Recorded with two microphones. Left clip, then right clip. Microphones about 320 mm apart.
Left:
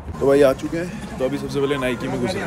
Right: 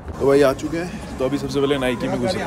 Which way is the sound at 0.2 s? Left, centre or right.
Centre.